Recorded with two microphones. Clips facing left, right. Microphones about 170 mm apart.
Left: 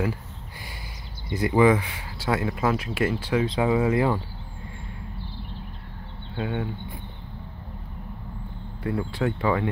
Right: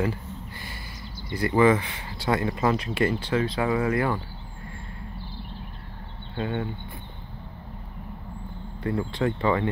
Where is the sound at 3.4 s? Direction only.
20° left (ahead or behind).